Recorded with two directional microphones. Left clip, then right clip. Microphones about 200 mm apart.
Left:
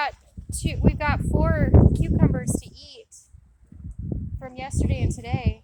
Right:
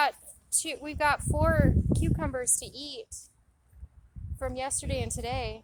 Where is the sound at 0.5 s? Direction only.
15° right (ahead or behind).